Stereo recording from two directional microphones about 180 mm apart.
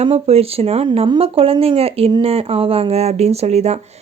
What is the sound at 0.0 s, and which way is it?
Speech, 35° right (ahead or behind).